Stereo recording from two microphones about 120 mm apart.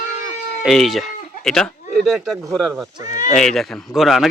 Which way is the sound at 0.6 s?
Centre (ahead or behind).